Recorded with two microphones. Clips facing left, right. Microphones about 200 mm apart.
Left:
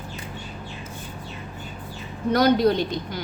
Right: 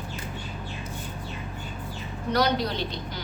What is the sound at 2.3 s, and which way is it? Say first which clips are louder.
Speech: left 7 dB; 50° left (ahead or behind).